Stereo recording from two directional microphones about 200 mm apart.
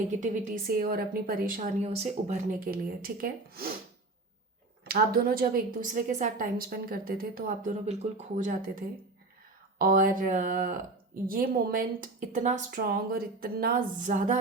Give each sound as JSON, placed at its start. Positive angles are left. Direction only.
{"t": 0.7, "sound": "a woman's voice", "side_deg": -45}
{"t": 4.9, "sound": "a woman's voice", "side_deg": -50}